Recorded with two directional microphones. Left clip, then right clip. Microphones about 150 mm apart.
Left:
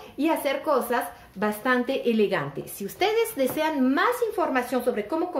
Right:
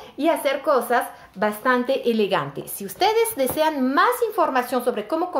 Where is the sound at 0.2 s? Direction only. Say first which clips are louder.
Right 4 dB; 20° left (ahead or behind).